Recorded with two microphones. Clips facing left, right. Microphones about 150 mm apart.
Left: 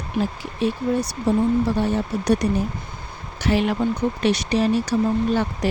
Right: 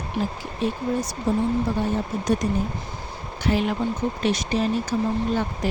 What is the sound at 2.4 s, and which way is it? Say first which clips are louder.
Speech: left 2 dB; 70° left (ahead or behind).